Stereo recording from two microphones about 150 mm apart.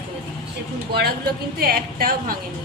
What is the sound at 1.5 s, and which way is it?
Speech, 90° right.